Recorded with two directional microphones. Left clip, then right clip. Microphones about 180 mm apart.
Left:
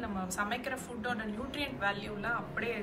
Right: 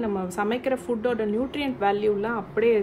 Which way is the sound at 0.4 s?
50° right (ahead or behind).